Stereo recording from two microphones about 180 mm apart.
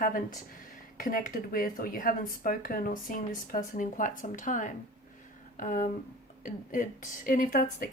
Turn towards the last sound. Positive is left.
turn(degrees=50)  # may be behind; listen again after turning